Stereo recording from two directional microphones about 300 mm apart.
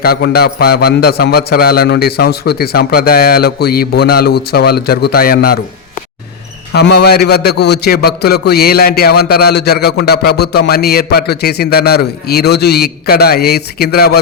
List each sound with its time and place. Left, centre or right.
0.0 s a man's voice: left
6.7 s a man's voice: left